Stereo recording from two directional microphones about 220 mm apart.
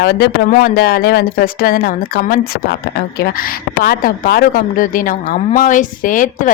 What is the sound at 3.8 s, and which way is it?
Speech, 40° left (ahead or behind).